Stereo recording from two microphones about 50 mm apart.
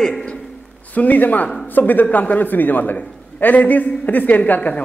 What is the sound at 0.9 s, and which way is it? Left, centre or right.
Speech, left.